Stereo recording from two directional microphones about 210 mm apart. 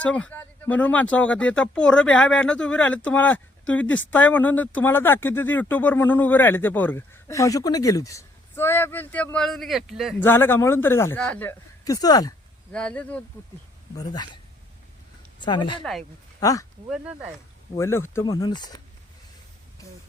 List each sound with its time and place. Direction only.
0.0 s speech: 5° left (ahead or behind)
10.2 s speech: 10° left (ahead or behind)
12.7 s speech: 5° left (ahead or behind)
13.9 s speech: 20° left (ahead or behind)
15.4 s speech: 20° left (ahead or behind)
15.8 s speech: centre (ahead or behind)
16.4 s speech: 15° left (ahead or behind)
16.9 s speech: 5° right (ahead or behind)
17.7 s speech: 10° left (ahead or behind)